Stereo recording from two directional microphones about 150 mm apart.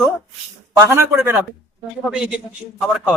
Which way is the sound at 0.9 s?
15° right (ahead or behind).